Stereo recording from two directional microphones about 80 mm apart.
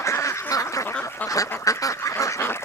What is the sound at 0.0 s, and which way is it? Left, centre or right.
Duck, left.